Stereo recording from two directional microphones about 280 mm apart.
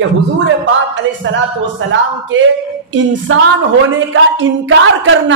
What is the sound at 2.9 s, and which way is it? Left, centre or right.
Female singing, right.